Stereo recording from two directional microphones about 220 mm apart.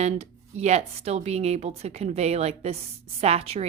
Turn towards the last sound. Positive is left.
turn(degrees=-25)  # may be behind; listen again after turning